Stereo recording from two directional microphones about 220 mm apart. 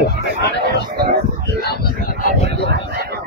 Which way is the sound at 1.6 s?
45° left (ahead or behind).